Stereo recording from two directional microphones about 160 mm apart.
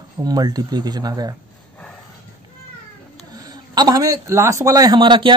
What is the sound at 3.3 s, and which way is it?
Speech, 25° right (ahead or behind).